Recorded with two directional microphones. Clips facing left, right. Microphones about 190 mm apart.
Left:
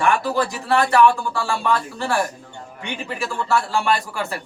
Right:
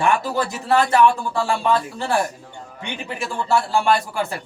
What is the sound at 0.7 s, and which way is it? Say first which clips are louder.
Speech: even; 20° right (ahead or behind).